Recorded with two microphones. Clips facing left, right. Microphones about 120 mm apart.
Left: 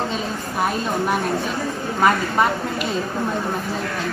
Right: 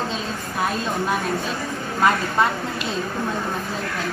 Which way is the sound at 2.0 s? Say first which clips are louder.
Left 1 dB; 20° left (ahead or behind).